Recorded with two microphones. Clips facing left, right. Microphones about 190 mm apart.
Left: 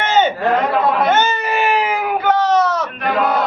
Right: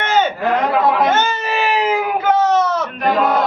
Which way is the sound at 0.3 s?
10° right (ahead or behind).